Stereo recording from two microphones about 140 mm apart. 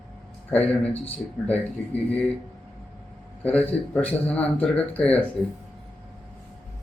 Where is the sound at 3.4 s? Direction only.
10° left (ahead or behind).